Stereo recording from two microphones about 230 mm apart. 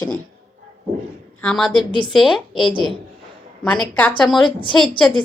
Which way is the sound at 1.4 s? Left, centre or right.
Centre.